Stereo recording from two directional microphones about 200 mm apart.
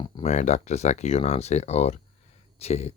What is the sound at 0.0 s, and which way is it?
Speech, 30° left (ahead or behind).